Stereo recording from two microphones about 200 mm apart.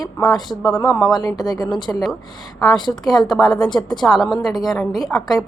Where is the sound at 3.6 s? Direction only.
5° left (ahead or behind).